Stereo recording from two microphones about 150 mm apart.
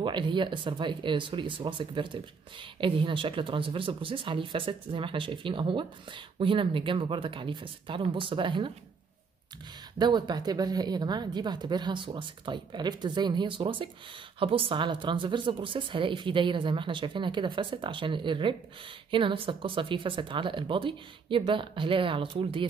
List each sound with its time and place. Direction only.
0.0 s speech: 30° right (ahead or behind)
9.9 s a woman's voice: 30° right (ahead or behind)